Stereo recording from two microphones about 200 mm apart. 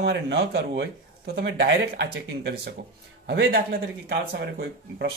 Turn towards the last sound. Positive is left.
turn(degrees=-55)  # may be behind; listen again after turning